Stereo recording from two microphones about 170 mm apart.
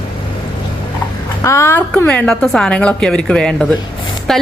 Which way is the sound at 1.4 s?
15° left (ahead or behind).